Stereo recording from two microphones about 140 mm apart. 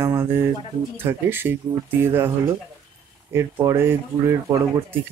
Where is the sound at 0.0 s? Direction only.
15° right (ahead or behind).